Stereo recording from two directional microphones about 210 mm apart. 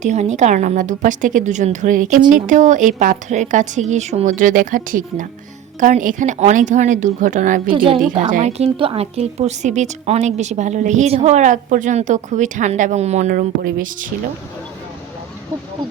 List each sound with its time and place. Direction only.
0.0 s a woman's voice: 35° right (ahead or behind)
7.7 s a woman's voice: 25° right (ahead or behind); by 14.1 s 40° right (ahead or behind)